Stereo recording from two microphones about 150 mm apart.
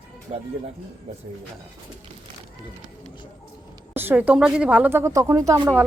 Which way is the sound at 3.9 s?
15° right (ahead or behind).